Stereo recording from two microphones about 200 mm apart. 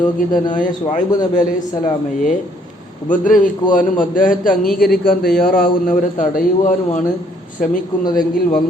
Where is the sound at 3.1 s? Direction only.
40° left (ahead or behind).